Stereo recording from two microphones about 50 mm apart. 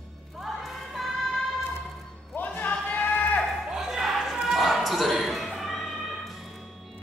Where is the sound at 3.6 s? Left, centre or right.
Centre.